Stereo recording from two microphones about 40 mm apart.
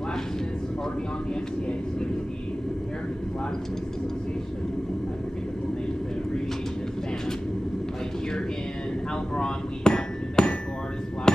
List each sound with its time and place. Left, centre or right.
9.3 s hammer: left